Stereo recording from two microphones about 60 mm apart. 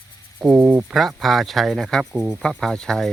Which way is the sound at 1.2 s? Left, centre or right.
Centre.